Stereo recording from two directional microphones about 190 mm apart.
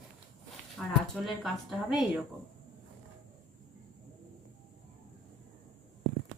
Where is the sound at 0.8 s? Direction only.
Centre (ahead or behind).